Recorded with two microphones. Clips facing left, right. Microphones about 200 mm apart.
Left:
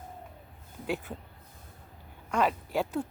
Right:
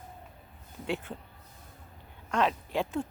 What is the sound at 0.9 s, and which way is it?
Speech, 5° left (ahead or behind).